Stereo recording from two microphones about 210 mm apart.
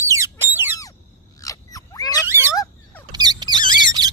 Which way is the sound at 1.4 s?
15° left (ahead or behind).